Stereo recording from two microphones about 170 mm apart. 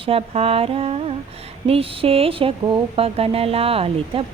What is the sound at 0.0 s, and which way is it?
Speech, 35° right (ahead or behind).